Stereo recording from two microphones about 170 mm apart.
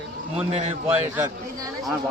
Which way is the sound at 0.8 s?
10° right (ahead or behind).